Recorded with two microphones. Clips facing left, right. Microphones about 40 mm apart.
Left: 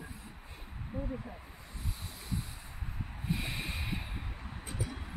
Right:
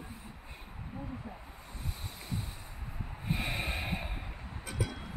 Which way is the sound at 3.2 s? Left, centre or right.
Right.